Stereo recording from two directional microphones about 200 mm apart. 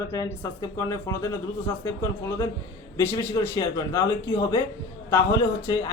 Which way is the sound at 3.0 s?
15° left (ahead or behind).